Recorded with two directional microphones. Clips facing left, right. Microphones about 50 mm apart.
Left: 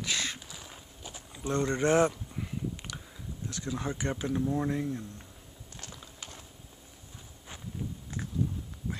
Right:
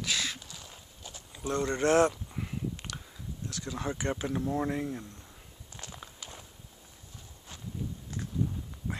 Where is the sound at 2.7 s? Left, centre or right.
Centre.